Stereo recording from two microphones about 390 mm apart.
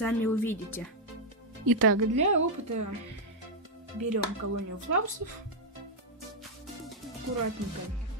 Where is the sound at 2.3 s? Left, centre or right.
Right.